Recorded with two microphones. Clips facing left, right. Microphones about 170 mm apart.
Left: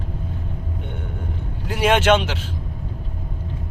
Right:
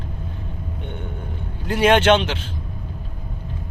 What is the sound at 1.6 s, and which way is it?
Speech, 10° left (ahead or behind).